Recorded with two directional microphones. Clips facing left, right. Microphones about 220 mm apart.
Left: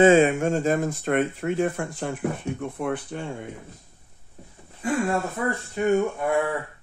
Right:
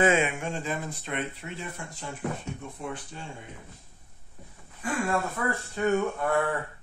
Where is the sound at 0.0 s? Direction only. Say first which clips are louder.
Left 8 dB; 35° left (ahead or behind); by 3.4 s 60° left (ahead or behind).